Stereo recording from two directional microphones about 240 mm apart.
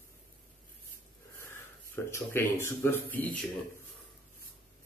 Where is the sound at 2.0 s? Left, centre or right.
Centre.